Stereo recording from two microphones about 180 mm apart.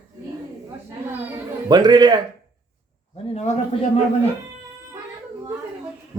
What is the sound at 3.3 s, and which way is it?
Speech, 40° left (ahead or behind).